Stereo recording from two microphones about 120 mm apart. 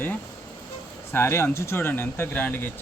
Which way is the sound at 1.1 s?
20° left (ahead or behind).